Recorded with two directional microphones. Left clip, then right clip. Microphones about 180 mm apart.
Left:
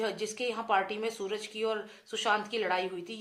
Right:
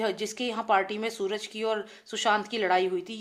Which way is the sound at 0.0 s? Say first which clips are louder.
Right 3 dB; 45° right (ahead or behind).